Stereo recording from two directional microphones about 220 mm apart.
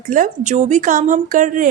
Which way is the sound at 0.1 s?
35° right (ahead or behind).